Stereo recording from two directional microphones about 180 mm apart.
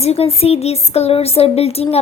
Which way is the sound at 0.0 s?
35° left (ahead or behind).